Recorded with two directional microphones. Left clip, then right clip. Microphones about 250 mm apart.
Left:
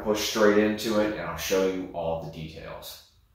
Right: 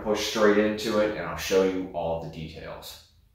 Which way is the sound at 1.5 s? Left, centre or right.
Centre.